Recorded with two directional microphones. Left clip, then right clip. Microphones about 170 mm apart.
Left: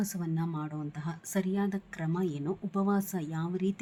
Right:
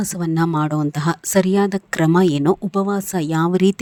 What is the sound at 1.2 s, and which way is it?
Speech, 55° right (ahead or behind).